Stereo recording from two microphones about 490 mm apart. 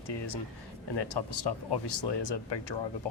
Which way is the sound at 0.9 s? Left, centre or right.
Left.